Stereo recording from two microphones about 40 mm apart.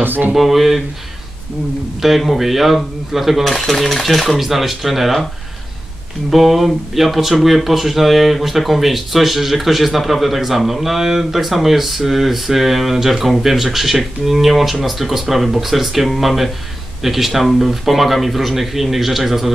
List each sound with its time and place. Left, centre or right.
0.0 s speech: right
0.3 s speech: centre
2.0 s speech: centre
3.4 s speech: centre
6.3 s speech: centre